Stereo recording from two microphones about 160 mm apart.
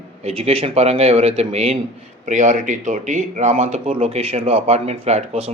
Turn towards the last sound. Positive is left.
turn(degrees=-40)  # may be behind; listen again after turning